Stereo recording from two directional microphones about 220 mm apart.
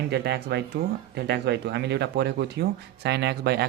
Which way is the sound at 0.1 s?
45° right (ahead or behind).